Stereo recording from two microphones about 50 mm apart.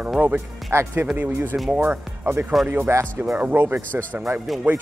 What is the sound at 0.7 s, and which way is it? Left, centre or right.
Speech, right.